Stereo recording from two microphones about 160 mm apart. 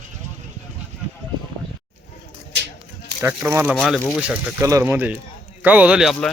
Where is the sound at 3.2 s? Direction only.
15° right (ahead or behind).